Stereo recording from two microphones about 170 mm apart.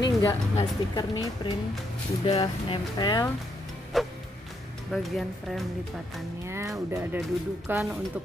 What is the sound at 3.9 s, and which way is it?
Music, centre (ahead or behind).